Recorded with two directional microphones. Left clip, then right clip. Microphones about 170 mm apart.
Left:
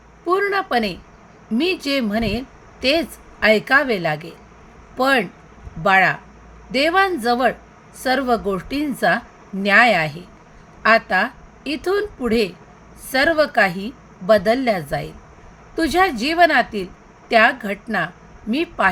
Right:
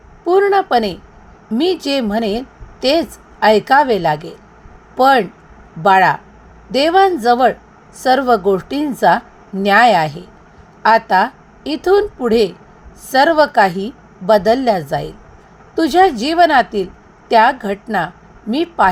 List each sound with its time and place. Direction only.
0.3 s a woman's voice: 15° right (ahead or behind)